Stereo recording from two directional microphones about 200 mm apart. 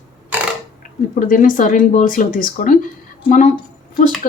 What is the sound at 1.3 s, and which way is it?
A woman's voice, 40° left (ahead or behind).